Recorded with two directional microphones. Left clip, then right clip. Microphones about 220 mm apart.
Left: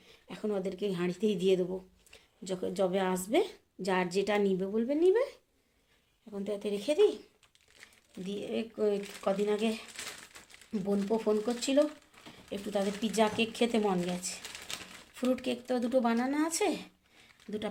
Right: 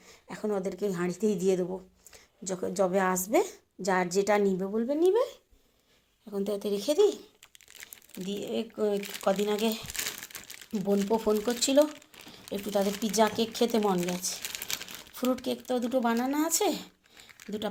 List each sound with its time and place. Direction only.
0.1 s a woman's voice: 5° right (ahead or behind)
7.7 s crumpling: 45° right (ahead or behind)
8.2 s speech: 10° right (ahead or behind)